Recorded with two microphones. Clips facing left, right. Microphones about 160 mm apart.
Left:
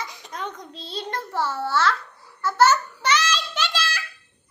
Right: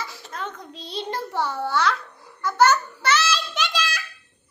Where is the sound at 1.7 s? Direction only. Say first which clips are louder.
Left 1 dB; 15° right (ahead or behind).